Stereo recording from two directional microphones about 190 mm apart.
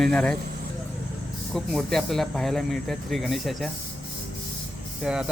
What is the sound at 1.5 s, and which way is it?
Speech, centre (ahead or behind).